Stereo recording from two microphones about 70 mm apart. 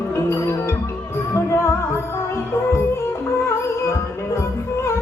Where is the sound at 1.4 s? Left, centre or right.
Left.